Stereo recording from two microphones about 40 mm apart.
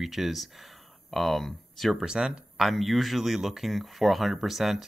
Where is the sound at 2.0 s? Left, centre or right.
Centre.